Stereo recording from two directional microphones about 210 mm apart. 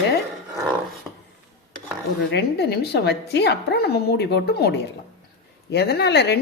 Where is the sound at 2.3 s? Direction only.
50° left (ahead or behind).